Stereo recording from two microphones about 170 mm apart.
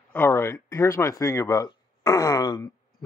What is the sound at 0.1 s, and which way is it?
Speech, 15° left (ahead or behind).